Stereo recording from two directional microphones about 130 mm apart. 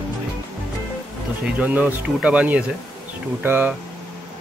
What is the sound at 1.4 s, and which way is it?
Speech, 10° right (ahead or behind).